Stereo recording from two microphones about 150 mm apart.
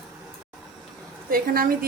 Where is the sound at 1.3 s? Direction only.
75° right (ahead or behind).